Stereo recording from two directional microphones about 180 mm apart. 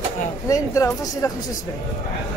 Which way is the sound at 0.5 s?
15° left (ahead or behind).